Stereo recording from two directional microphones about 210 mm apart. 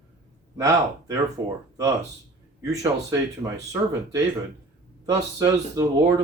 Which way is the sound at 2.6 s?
15° right (ahead or behind).